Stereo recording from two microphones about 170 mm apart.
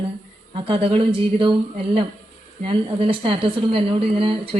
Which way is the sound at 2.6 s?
30° right (ahead or behind).